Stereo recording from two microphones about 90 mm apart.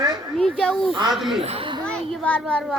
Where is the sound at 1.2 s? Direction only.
5° right (ahead or behind).